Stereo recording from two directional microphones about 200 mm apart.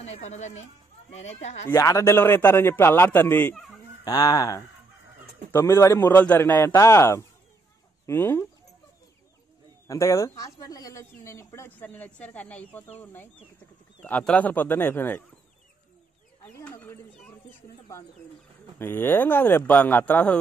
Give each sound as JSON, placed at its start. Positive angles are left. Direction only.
{"t": 0.0, "sound": "speech", "side_deg": 35}
{"t": 1.7, "sound": "speech", "side_deg": 15}
{"t": 4.0, "sound": "speech", "side_deg": 20}
{"t": 9.8, "sound": "speech", "side_deg": 15}
{"t": 16.5, "sound": "bird", "side_deg": 10}
{"t": 18.8, "sound": "speech", "side_deg": 10}